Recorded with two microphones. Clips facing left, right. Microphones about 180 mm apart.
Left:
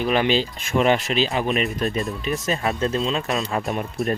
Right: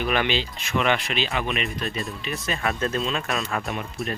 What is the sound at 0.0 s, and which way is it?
Speech, 35° left (ahead or behind).